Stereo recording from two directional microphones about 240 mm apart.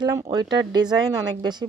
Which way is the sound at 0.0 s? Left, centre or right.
Centre.